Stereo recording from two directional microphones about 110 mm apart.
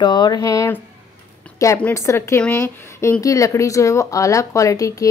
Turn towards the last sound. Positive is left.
turn(degrees=30)  # may be behind; listen again after turning